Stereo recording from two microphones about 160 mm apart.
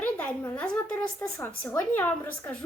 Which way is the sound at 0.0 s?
10° left (ahead or behind).